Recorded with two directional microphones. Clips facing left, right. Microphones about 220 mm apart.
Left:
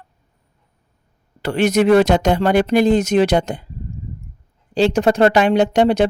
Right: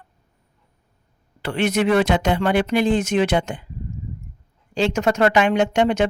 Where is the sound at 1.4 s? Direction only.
40° left (ahead or behind).